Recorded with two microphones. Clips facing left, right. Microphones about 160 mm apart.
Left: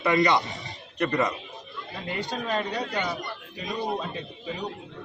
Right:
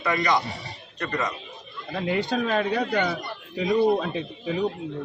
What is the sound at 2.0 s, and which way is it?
A man's voice, 65° right (ahead or behind).